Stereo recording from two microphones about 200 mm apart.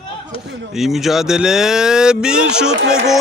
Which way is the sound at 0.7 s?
Centre (ahead or behind).